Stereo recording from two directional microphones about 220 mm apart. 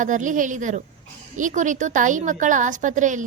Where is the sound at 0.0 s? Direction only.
35° right (ahead or behind).